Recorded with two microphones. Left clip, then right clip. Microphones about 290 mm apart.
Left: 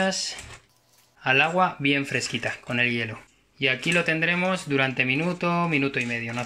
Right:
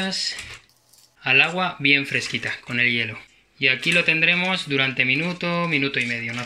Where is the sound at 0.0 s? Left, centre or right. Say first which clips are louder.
Even; centre.